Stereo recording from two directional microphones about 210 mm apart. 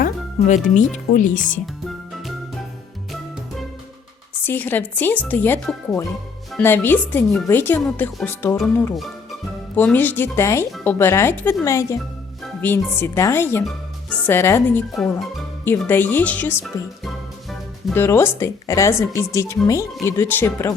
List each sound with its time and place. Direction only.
0.0 s speech: 35° left (ahead or behind)
4.4 s speech: 10° left (ahead or behind)